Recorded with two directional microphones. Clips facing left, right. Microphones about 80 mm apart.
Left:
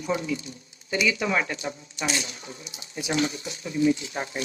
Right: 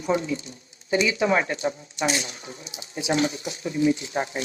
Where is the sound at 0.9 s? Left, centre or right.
Right.